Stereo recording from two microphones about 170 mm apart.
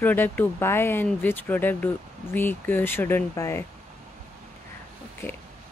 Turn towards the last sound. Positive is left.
turn(degrees=15)  # may be behind; listen again after turning